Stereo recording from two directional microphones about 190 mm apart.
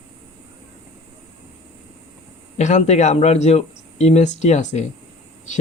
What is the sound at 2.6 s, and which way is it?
Speech, 35° left (ahead or behind).